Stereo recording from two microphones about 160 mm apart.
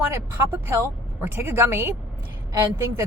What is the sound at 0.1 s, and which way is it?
A woman's voice, 15° right (ahead or behind).